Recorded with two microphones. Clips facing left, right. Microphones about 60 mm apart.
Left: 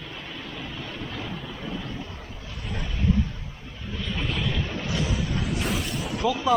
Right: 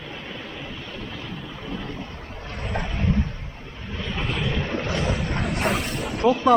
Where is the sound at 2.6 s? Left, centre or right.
Right.